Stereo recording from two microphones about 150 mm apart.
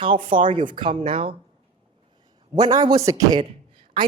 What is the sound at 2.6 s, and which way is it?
Speech, 25° right (ahead or behind).